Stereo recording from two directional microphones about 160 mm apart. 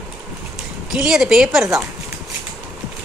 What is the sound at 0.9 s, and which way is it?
Speech, 5° right (ahead or behind).